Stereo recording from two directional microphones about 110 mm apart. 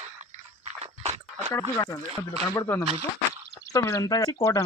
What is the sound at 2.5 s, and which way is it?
Speech, 30° left (ahead or behind).